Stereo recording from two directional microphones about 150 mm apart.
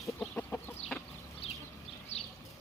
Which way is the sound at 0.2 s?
15° left (ahead or behind).